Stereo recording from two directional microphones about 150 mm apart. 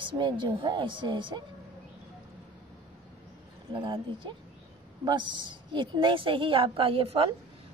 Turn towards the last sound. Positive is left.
turn(degrees=-40)  # may be behind; listen again after turning